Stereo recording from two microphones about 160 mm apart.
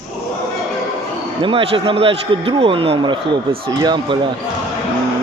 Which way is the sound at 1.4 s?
30° right (ahead or behind).